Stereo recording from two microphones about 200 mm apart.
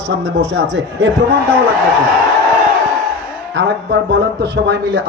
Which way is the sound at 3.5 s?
55° right (ahead or behind).